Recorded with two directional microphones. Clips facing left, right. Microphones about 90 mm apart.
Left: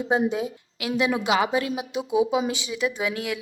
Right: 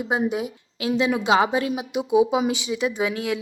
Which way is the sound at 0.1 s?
20° right (ahead or behind).